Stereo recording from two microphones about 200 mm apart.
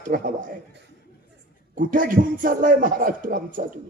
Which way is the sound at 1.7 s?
40° right (ahead or behind).